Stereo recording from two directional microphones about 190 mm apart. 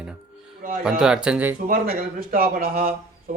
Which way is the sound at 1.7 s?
50° right (ahead or behind).